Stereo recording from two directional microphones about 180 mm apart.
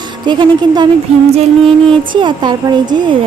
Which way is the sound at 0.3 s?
25° right (ahead or behind).